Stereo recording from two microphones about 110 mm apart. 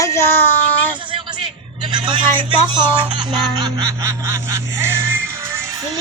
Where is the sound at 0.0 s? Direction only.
25° left (ahead or behind).